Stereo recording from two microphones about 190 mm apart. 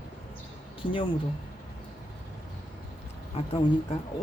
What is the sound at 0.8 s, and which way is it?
Speech, 25° left (ahead or behind).